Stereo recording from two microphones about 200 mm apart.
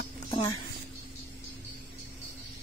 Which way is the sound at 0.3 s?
20° left (ahead or behind).